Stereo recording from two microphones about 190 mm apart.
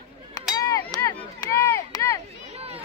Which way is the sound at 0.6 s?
15° left (ahead or behind).